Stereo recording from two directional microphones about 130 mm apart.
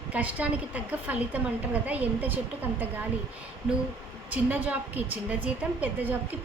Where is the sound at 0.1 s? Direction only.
10° right (ahead or behind).